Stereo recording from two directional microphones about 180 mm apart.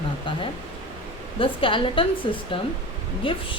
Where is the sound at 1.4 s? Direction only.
30° left (ahead or behind).